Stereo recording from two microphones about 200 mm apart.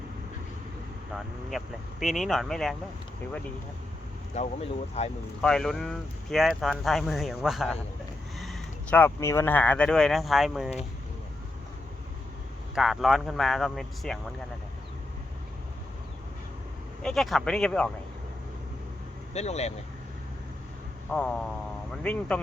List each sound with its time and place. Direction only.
1.1 s speech: centre (ahead or behind)
5.0 s speech: 30° left (ahead or behind)
5.4 s speech: 5° left (ahead or behind)
12.7 s speech: centre (ahead or behind)
17.0 s speech: centre (ahead or behind)
19.3 s speech: 35° left (ahead or behind)
21.1 s speech: 5° left (ahead or behind)